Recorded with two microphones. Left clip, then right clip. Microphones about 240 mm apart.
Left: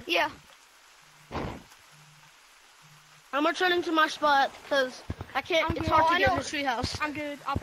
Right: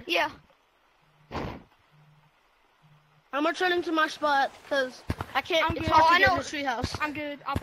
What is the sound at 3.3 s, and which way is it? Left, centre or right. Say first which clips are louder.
Speech: left 1 dB; centre.